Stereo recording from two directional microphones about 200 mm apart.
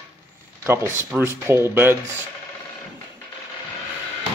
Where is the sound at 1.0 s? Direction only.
10° right (ahead or behind).